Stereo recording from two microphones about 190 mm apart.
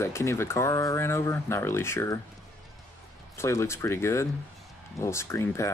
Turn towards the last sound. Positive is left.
turn(degrees=15)  # may be behind; listen again after turning